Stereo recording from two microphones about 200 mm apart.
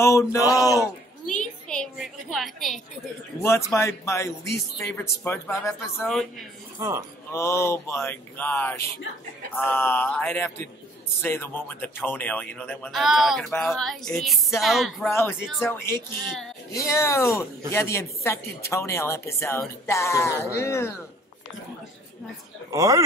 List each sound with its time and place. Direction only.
0.0 s speech: 15° left (ahead or behind)
0.7 s a woman's voice: 5° left (ahead or behind)
3.4 s speech: 15° left (ahead or behind)
6.8 s speech: 15° right (ahead or behind)
7.3 s speech: 15° left (ahead or behind)
15.6 s speech: 10° left (ahead or behind)
22.7 s speech: 15° right (ahead or behind)